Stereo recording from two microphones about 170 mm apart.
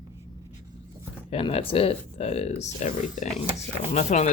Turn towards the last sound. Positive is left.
turn(degrees=45)  # may be behind; listen again after turning